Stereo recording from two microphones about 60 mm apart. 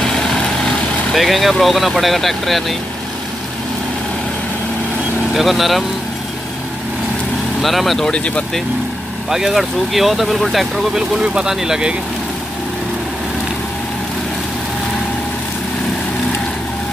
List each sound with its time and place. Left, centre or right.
1.1 s speech: centre
5.3 s speech: centre
7.6 s speech: centre
8.1 s speech: centre
9.3 s speech: centre
11.2 s speech: centre